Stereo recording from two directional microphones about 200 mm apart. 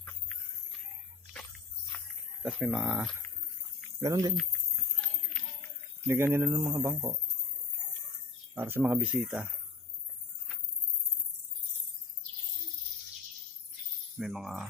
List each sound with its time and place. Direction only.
0.0 s jingle bell: 5° left (ahead or behind)
1.3 s snake: 5° left (ahead or behind)
2.4 s speech: 5° right (ahead or behind)
4.0 s speech: 15° right (ahead or behind)
6.1 s speech: 10° right (ahead or behind)
8.5 s speech: 10° right (ahead or behind)
14.2 s a sound: centre (ahead or behind)